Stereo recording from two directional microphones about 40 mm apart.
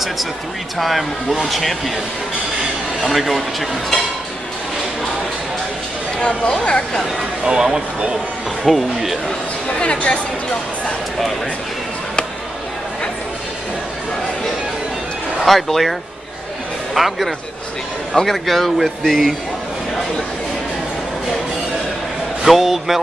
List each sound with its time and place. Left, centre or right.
0.7 s speech: centre
3.0 s speech: centre
6.1 s speech: left
7.4 s speech: centre
8.6 s speech: centre
9.8 s speech: left
15.4 s speech: centre
22.4 s speech: centre